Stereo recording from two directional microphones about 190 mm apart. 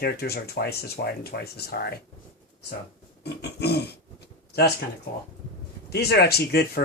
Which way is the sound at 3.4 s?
60° left (ahead or behind).